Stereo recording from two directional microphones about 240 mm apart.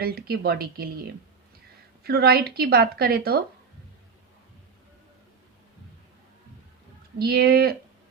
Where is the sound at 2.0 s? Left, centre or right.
Right.